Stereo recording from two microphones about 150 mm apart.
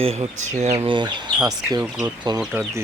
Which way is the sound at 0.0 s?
40° right (ahead or behind).